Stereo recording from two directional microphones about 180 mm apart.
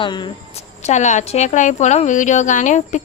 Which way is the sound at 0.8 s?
40° left (ahead or behind).